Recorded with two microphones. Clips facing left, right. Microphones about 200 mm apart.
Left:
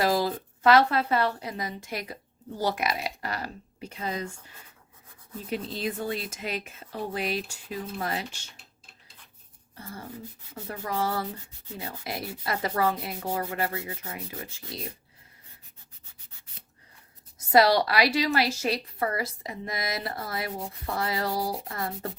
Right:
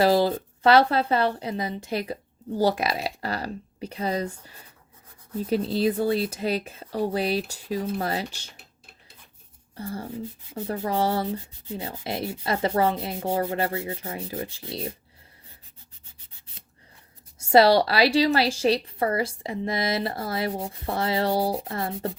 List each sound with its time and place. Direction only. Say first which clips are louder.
0.0 s a woman's voice: right 5 dB; 30° right (ahead or behind)
9.7 s a woman's voice: right 8 dB; 30° right (ahead or behind)
17.4 s a woman's voice: right 4 dB; 30° right (ahead or behind)